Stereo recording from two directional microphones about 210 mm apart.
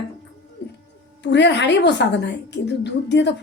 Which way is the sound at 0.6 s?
55° left (ahead or behind).